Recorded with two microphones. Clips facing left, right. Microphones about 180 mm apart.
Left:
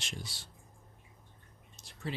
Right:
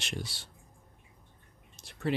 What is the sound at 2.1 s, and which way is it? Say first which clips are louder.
Speech: right 9 dB; 65° right (ahead or behind).